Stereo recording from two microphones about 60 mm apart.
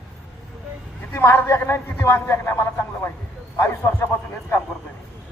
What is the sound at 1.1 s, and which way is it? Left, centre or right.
A man's voice, left.